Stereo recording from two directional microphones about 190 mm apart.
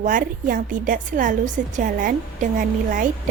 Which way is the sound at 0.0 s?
45° right (ahead or behind).